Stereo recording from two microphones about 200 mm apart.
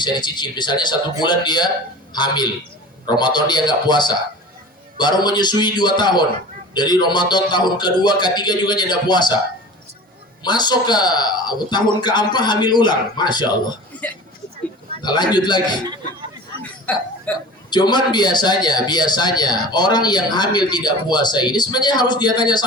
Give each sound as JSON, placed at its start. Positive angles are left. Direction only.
{"t": 0.0, "sound": "speech", "side_deg": 20}
{"t": 10.4, "sound": "speech", "side_deg": 20}
{"t": 13.9, "sound": "a sound", "side_deg": 5}
{"t": 15.0, "sound": "speech", "side_deg": 20}
{"t": 16.9, "sound": "burping", "side_deg": 10}
{"t": 17.7, "sound": "speech", "side_deg": 20}